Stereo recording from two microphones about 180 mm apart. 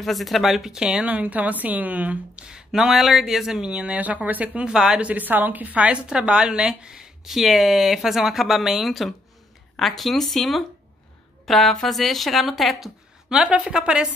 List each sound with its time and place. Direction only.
0.0 s a woman's voice: centre (ahead or behind)